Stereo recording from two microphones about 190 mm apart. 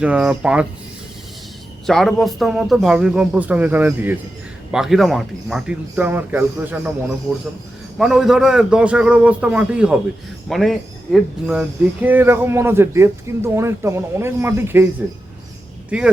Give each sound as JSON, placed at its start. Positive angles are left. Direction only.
{"t": 0.0, "sound": "a man's voice", "side_deg": -5}
{"t": 1.9, "sound": "a man's voice", "side_deg": 0}
{"t": 7.9, "sound": "a man's voice", "side_deg": 0}
{"t": 15.9, "sound": "a man's voice", "side_deg": -5}